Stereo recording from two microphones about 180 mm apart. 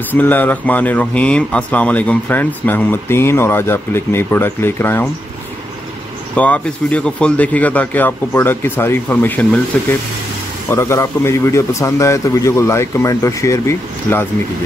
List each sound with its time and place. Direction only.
0.1 s speech: 10° left (ahead or behind)
6.3 s speech: 10° left (ahead or behind)